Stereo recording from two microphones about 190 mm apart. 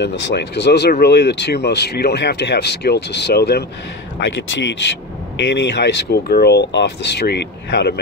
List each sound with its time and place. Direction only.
0.0 s speech: 65° left (ahead or behind)